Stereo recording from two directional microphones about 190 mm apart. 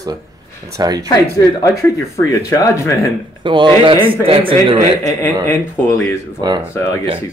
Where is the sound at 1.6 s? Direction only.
15° left (ahead or behind).